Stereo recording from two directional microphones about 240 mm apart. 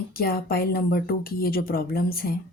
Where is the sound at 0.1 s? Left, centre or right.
Left.